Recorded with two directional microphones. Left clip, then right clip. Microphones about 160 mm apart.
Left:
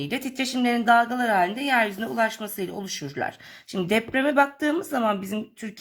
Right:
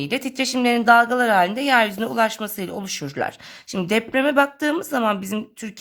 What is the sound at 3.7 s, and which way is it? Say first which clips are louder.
Speech: right 3 dB; 25° right (ahead or behind).